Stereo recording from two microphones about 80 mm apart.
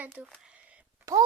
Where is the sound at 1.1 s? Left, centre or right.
Right.